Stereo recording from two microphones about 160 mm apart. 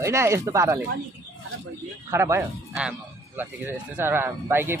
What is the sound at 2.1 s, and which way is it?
Speech, 15° right (ahead or behind).